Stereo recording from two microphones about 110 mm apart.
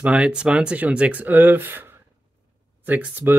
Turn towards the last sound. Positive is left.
turn(degrees=-15)  # may be behind; listen again after turning